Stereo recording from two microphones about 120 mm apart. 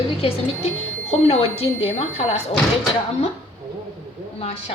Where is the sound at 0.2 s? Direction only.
55° left (ahead or behind).